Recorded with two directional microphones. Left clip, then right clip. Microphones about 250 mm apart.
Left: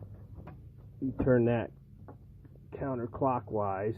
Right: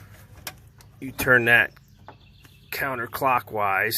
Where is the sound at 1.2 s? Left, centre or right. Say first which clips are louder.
Right 11 dB; centre.